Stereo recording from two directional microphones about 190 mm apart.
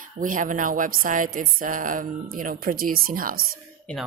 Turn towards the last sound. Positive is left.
turn(degrees=-50)  # may be behind; listen again after turning